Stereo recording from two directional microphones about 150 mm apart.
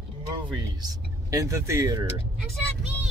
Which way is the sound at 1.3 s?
20° right (ahead or behind).